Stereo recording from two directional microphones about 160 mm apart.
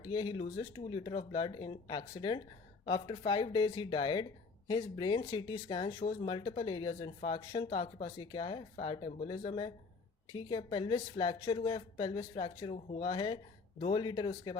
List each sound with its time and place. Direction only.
0.0 s speech: 25° left (ahead or behind)